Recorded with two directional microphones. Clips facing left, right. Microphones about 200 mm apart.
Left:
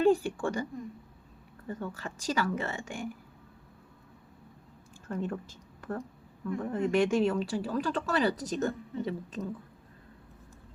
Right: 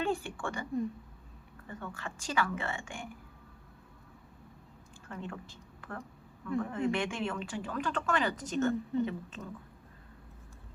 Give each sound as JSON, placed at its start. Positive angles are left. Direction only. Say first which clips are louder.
{"t": 0.0, "sound": "a woman's voice", "louder": "left 9 dB", "side_deg": 40}
{"t": 5.0, "sound": "a woman's voice", "louder": "left 8 dB", "side_deg": 45}